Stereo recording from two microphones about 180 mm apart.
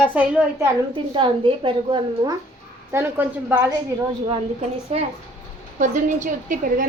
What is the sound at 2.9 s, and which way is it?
Speech, 15° right (ahead or behind).